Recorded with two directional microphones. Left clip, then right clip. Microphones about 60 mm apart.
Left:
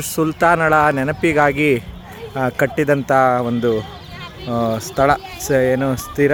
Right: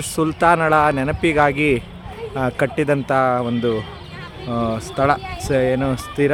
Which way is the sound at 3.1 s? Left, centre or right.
Left.